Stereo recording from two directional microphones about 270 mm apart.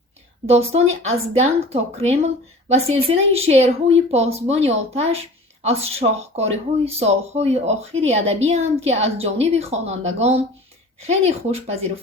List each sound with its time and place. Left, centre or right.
0.4 s speech: right